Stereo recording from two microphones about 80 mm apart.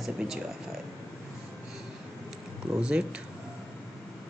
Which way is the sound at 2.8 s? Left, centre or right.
Centre.